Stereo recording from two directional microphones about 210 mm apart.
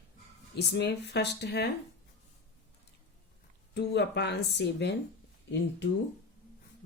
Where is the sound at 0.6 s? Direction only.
55° left (ahead or behind).